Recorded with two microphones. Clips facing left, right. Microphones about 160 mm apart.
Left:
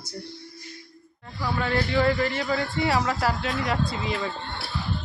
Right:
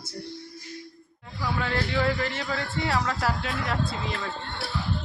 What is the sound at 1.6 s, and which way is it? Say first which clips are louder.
A man's voice: left 4 dB; centre (ahead or behind).